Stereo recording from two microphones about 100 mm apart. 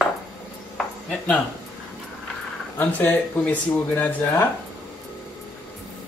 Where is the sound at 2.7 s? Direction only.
20° left (ahead or behind).